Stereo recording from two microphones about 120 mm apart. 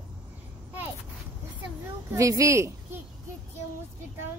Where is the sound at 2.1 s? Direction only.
25° right (ahead or behind).